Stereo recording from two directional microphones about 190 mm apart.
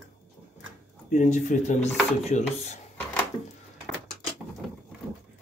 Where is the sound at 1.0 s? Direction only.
40° left (ahead or behind).